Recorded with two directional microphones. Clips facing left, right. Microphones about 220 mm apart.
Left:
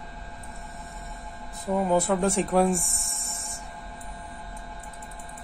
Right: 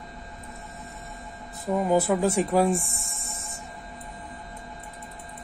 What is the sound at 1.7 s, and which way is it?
Speech, 5° right (ahead or behind).